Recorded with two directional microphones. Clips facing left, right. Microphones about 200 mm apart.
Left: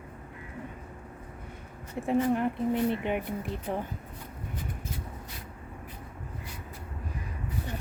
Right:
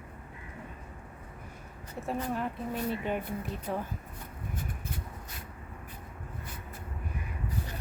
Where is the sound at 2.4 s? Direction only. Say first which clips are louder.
Left 6 dB; 20° left (ahead or behind).